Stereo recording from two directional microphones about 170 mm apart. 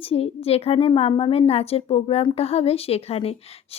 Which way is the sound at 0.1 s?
35° left (ahead or behind).